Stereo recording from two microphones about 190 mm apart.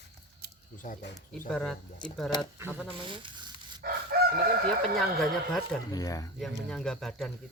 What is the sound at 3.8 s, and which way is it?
Crowing, 50° right (ahead or behind).